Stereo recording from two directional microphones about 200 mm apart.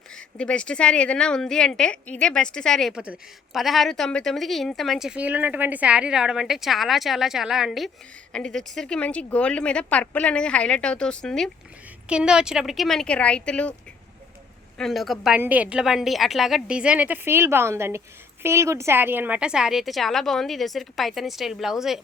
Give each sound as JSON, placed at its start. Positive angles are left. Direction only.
{"t": 0.1, "sound": "a woman's voice", "side_deg": 5}
{"t": 14.8, "sound": "a woman's voice", "side_deg": 0}